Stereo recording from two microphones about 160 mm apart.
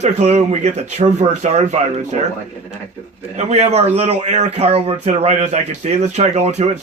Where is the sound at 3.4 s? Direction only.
45° right (ahead or behind).